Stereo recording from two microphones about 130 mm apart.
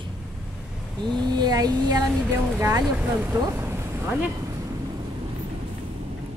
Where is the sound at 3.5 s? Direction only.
20° right (ahead or behind).